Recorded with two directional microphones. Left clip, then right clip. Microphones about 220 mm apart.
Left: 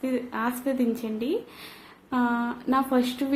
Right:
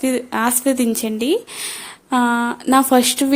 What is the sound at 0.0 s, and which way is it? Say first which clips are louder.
Speech: right 9 dB; 40° right (ahead or behind).